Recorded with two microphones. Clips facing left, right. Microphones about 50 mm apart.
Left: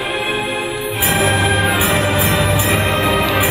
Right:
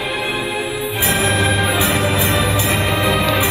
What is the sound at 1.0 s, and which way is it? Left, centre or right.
Music, left.